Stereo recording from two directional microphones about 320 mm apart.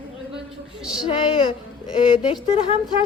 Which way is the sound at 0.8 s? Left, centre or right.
Centre.